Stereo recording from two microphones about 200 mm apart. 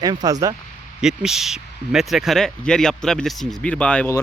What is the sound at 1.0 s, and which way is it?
Speech, 5° right (ahead or behind).